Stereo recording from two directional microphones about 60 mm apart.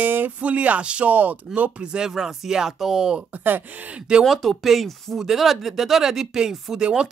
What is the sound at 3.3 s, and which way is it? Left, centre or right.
Speech, right.